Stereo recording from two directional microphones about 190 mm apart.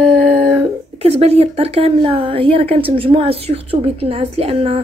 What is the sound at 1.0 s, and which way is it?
Speech, 35° right (ahead or behind).